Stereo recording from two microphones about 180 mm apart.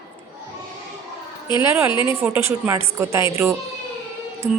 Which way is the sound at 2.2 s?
15° right (ahead or behind).